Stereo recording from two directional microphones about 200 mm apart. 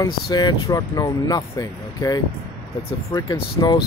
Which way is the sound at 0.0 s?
20° left (ahead or behind).